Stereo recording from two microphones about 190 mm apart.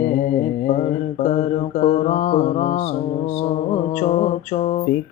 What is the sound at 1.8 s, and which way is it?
Mantra, 35° left (ahead or behind).